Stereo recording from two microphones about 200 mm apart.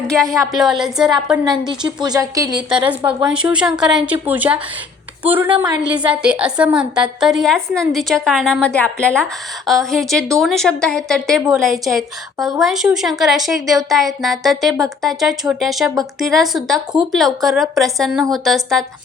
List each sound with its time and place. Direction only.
0.1 s a woman's voice: centre (ahead or behind)
1.5 s a woman's voice: 20° right (ahead or behind)
2.9 s a woman's voice: 5° right (ahead or behind)